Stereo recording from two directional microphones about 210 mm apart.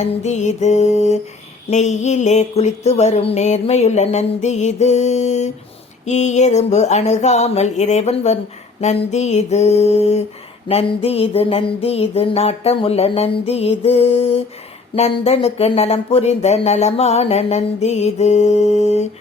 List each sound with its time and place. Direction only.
0.0 s speech: 35° left (ahead or behind)
10.7 s music: 30° left (ahead or behind)
14.9 s speech: 30° left (ahead or behind)